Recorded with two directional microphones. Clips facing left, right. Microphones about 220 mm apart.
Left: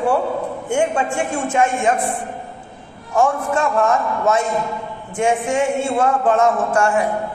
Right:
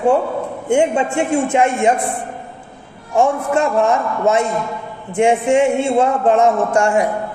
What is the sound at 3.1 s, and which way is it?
A man's voice, 25° right (ahead or behind).